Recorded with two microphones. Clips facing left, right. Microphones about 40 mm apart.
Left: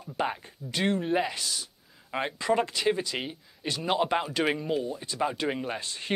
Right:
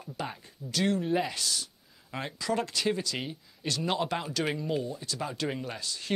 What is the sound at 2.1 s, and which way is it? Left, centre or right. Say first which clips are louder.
Speech: left 5 dB; left.